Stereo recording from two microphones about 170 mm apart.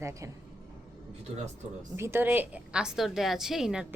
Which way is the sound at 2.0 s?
15° right (ahead or behind).